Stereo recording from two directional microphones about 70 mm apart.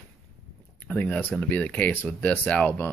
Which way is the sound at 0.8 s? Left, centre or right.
Left.